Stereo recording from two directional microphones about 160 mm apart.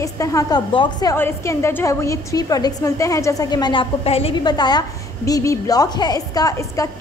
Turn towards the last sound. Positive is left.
turn(degrees=20)  # may be behind; listen again after turning